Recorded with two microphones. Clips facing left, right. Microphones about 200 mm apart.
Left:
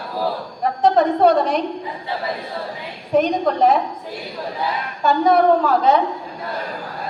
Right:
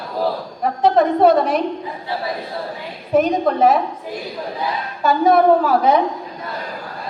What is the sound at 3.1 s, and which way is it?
Speech, 5° right (ahead or behind).